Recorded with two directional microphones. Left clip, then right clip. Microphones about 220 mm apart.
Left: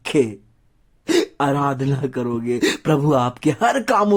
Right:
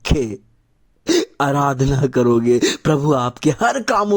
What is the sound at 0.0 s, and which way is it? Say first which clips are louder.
Speech: left 2 dB; 25° right (ahead or behind).